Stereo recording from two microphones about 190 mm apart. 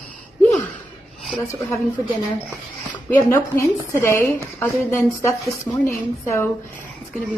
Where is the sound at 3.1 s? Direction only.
15° left (ahead or behind).